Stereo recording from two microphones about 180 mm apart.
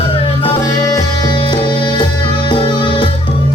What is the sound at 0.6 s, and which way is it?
Music, 20° left (ahead or behind).